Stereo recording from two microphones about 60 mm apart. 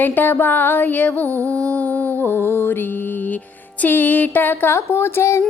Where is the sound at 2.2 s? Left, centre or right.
Left.